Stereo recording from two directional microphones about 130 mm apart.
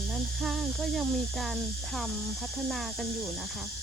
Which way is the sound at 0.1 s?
5° right (ahead or behind).